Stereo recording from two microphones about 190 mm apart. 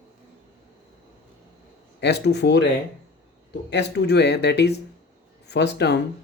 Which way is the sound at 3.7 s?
65° left (ahead or behind).